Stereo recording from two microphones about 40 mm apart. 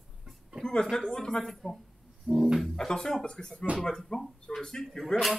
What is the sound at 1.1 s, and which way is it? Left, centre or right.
Speech, centre.